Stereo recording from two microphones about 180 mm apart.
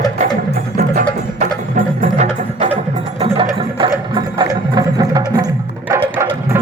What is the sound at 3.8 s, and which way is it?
Music, 25° right (ahead or behind).